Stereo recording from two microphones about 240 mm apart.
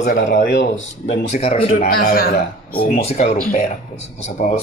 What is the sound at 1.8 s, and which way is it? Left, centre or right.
A man's voice, left.